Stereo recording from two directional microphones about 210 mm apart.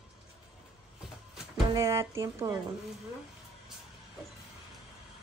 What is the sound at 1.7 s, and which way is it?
Speech, 15° right (ahead or behind).